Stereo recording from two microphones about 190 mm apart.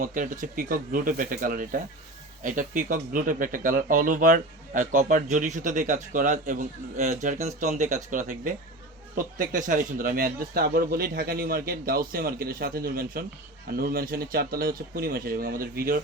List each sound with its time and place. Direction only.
0.0 s speech: 45° right (ahead or behind)